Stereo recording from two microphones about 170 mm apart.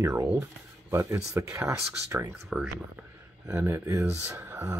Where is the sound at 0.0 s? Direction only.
20° right (ahead or behind).